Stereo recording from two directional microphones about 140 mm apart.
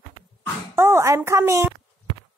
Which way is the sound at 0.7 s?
20° right (ahead or behind).